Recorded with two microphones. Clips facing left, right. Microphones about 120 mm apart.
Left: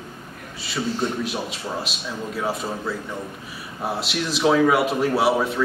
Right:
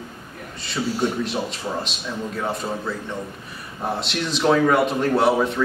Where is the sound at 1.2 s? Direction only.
5° left (ahead or behind).